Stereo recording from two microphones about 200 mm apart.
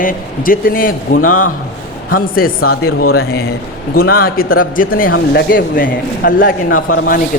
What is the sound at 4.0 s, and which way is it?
A man's voice, 50° left (ahead or behind).